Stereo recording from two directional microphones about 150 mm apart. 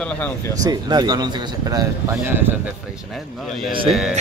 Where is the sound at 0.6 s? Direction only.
25° right (ahead or behind).